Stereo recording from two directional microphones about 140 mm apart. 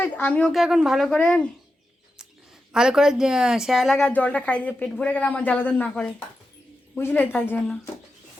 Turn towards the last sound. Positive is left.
turn(degrees=10)  # may be behind; listen again after turning